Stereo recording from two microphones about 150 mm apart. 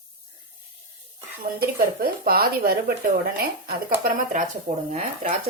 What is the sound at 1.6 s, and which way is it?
Speech, 80° right.